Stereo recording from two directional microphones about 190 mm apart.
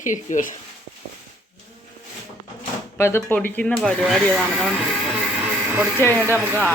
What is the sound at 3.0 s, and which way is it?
Speech, 15° left (ahead or behind).